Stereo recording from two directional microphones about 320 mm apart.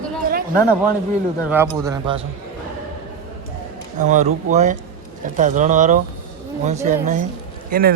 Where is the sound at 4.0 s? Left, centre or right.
Right.